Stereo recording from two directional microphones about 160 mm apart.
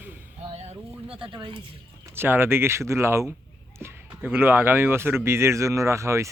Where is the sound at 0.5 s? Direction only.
40° right (ahead or behind).